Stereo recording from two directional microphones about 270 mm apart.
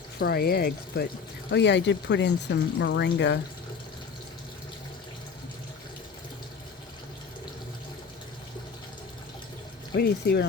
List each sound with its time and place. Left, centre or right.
0.2 s speech: left
9.9 s speech: left